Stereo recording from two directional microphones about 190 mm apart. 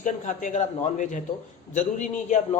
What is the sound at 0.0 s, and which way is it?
A man's voice, 40° left (ahead or behind).